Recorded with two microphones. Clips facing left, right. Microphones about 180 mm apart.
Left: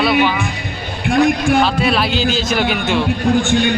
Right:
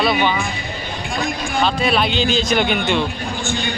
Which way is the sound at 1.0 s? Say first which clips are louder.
Left 12 dB; 70° left (ahead or behind).